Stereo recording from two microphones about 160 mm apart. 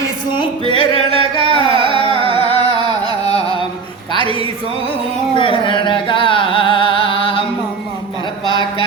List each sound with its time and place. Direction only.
0.3 s music: 35° left (ahead or behind)
1.1 s carnatic music: 35° right (ahead or behind)
2.4 s carnatic music: 40° left (ahead or behind)
4.2 s speech: 35° right (ahead or behind)
5.4 s music: 30° left (ahead or behind)